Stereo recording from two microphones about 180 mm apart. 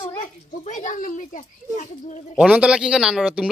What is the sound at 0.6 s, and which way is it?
Speech, 45° left (ahead or behind).